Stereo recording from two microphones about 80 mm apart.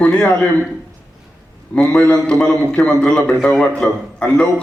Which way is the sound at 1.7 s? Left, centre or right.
Centre.